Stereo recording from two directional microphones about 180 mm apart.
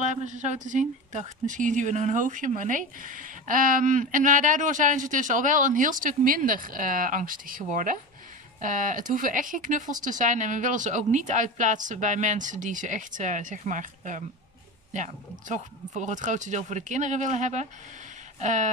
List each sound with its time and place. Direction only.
0.0 s speech: 45° right (ahead or behind)